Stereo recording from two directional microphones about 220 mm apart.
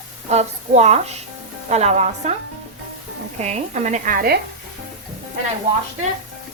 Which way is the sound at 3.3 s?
30° right (ahead or behind).